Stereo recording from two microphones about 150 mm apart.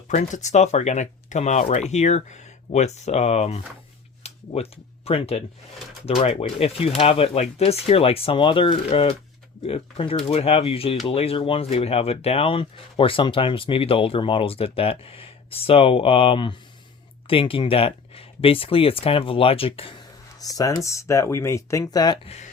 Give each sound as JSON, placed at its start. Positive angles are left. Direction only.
{"t": 0.1, "sound": "speech", "side_deg": 55}
{"t": 4.2, "sound": "a sound", "side_deg": 45}
{"t": 6.1, "sound": "speech", "side_deg": 45}
{"t": 20.4, "sound": "speech", "side_deg": 25}